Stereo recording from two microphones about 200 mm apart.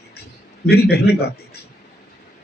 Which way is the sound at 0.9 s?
55° left (ahead or behind).